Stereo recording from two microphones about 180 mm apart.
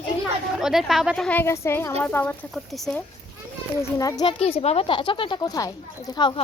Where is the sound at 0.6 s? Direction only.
Centre (ahead or behind).